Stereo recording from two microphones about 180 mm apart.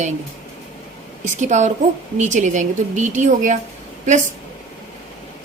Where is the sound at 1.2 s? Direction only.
40° right (ahead or behind).